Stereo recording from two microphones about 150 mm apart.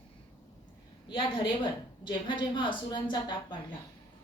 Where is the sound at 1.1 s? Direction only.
35° left (ahead or behind).